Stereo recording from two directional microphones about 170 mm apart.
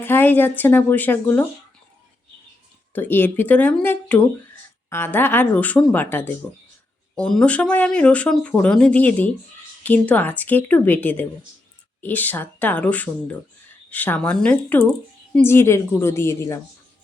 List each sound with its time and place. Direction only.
0.0 s speech: 10° left (ahead or behind)
2.9 s speech: 10° left (ahead or behind)